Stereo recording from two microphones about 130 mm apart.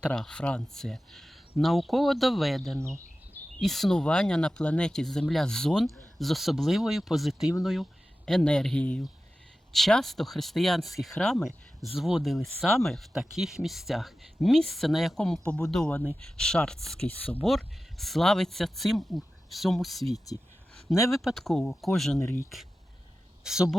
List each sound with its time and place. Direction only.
0.1 s speech: 5° left (ahead or behind)
2.7 s speech: 20° right (ahead or behind)
3.6 s speech: centre (ahead or behind)
22.2 s speech: 20° left (ahead or behind)
23.4 s speech: 5° right (ahead or behind)